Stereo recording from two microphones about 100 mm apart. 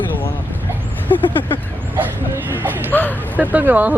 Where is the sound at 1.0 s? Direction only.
20° left (ahead or behind).